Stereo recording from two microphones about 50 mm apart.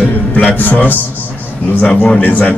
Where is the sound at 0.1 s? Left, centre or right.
Left.